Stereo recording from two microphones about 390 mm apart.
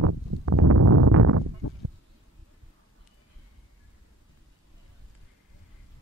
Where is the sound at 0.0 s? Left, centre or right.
Right.